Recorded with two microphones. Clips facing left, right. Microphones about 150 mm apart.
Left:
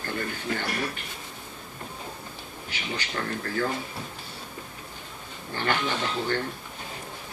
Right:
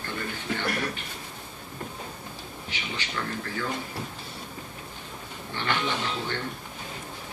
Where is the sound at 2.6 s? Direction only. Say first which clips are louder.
Left 2 dB; 40° left (ahead or behind).